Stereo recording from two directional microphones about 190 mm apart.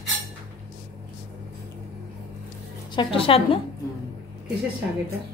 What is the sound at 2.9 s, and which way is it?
Speech, 25° left (ahead or behind).